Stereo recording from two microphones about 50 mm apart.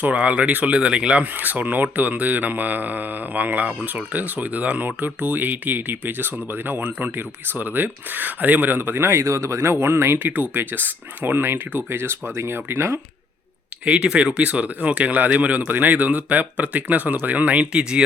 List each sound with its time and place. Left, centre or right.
0.0 s speech: right
1.2 s speech: right
10.3 s speech: right
13.9 s speech: centre